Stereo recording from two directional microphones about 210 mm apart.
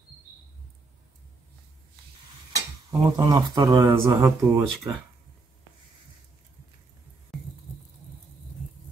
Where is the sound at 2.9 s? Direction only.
15° right (ahead or behind).